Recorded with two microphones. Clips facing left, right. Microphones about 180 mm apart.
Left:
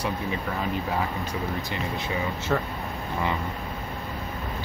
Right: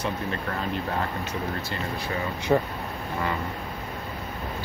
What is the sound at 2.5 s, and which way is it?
Speech, 20° right (ahead or behind).